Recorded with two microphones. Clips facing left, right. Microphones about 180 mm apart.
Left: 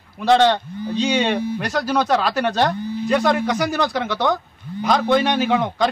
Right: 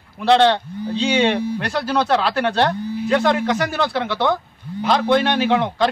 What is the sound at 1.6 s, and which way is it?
Speech, 15° left (ahead or behind).